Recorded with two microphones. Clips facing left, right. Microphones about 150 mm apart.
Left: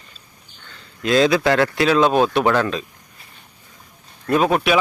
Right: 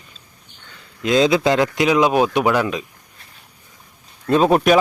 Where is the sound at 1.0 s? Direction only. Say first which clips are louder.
Even; 20° right (ahead or behind).